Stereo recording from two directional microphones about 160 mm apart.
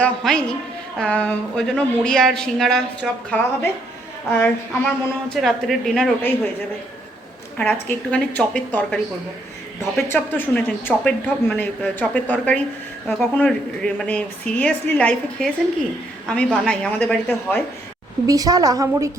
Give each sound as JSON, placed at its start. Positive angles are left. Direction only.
{"t": 0.0, "sound": "speech", "side_deg": 5}
{"t": 7.6, "sound": "speech", "side_deg": 10}
{"t": 10.1, "sound": "speech", "side_deg": 10}
{"t": 18.3, "sound": "a woman's voice", "side_deg": -20}